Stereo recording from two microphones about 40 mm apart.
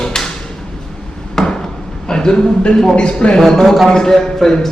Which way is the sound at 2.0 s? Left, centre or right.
Centre.